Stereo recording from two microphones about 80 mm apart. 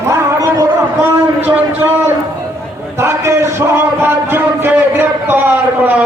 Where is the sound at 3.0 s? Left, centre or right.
Right.